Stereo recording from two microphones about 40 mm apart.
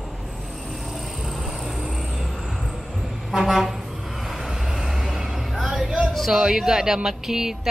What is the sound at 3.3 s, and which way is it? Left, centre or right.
Vehicle, centre.